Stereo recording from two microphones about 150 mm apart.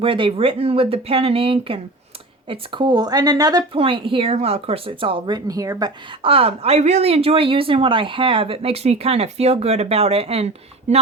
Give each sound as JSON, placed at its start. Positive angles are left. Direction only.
{"t": 0.0, "sound": "speech", "side_deg": -35}